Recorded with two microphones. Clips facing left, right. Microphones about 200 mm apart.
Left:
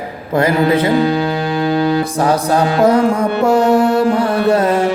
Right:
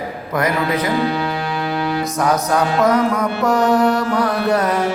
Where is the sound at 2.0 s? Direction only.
30° left (ahead or behind).